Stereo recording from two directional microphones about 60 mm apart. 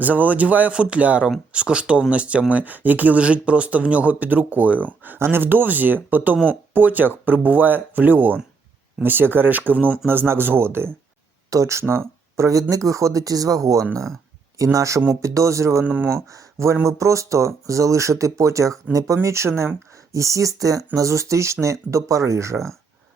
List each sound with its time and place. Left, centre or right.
0.0 s speech: right
11.5 s speech: right
15.8 s speech: right
16.0 s speech: right
20.1 s speech: right